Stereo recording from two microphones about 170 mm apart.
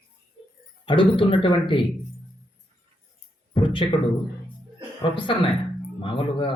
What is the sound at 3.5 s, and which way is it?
Speech, 30° left (ahead or behind).